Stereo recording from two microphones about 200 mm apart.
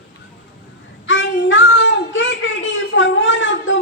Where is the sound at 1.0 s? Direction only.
70° left (ahead or behind).